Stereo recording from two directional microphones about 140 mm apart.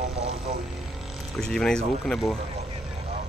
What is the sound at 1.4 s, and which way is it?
Speech, 5° left (ahead or behind).